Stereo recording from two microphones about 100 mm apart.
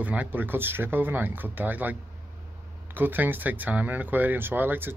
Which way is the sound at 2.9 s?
20° right (ahead or behind).